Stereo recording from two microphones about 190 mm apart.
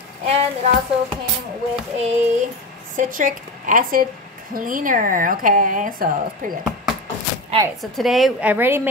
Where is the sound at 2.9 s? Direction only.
45° right (ahead or behind).